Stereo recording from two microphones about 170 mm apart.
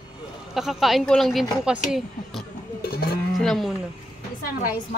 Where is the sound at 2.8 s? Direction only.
70° left (ahead or behind).